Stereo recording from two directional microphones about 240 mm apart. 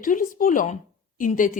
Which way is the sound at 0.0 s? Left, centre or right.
Left.